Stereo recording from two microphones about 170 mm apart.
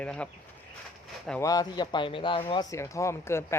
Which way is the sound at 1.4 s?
20° left (ahead or behind).